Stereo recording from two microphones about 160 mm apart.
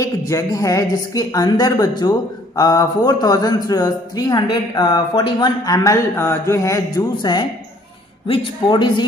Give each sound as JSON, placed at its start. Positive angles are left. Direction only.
{"t": 0.3, "sound": "speech", "side_deg": 20}
{"t": 8.6, "sound": "speech", "side_deg": 30}